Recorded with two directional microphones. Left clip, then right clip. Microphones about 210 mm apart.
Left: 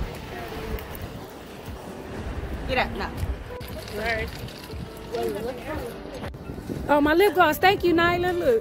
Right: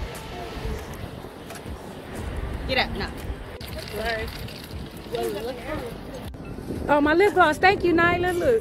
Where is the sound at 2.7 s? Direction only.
35° left (ahead or behind).